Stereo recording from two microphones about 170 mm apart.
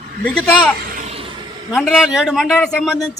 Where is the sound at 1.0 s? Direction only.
40° right (ahead or behind).